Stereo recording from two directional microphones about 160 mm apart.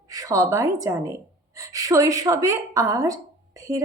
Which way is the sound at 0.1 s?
20° right (ahead or behind).